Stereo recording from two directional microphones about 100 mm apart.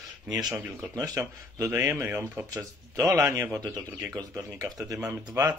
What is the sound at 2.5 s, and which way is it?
Speech, 35° right (ahead or behind).